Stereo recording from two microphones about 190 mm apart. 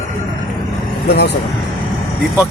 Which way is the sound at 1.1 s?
60° left (ahead or behind).